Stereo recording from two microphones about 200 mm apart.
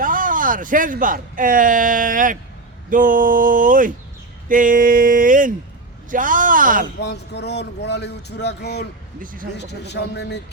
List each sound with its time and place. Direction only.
0.0 s speech: 40° right (ahead or behind)
7.0 s speech: 60° left (ahead or behind)
9.2 s speech: 45° right (ahead or behind)
9.6 s speech: 55° left (ahead or behind)